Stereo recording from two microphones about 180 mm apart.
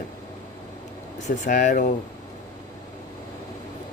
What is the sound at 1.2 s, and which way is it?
Speech, 45° left (ahead or behind).